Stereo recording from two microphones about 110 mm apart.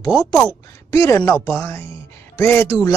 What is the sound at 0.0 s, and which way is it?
A man's voice, 35° left (ahead or behind).